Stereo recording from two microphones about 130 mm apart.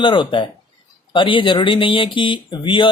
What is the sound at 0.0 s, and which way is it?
Speech, 40° left (ahead or behind).